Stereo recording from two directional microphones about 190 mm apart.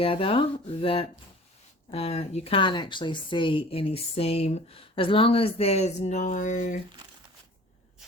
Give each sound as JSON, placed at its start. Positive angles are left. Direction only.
{"t": 0.0, "sound": "a woman's voice", "side_deg": 30}